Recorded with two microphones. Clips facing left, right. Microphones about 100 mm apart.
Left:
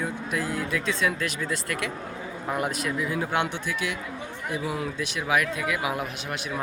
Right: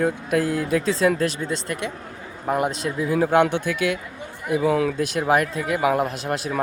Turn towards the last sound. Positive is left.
turn(degrees=-40)  # may be behind; listen again after turning